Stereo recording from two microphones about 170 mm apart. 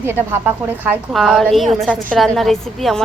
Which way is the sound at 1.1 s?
Centre (ahead or behind).